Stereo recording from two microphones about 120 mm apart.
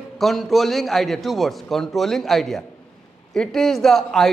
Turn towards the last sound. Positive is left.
turn(degrees=5)  # may be behind; listen again after turning